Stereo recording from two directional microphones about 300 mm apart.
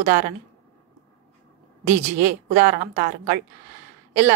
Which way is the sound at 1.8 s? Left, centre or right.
Right.